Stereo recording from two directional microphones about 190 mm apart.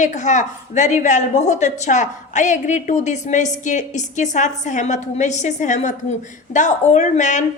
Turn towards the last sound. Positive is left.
turn(degrees=40)  # may be behind; listen again after turning